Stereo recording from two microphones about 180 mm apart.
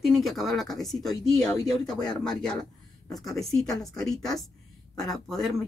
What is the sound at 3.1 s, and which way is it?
Speech, 20° left (ahead or behind).